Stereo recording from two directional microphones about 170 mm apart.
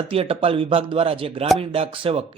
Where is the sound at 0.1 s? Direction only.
35° right (ahead or behind).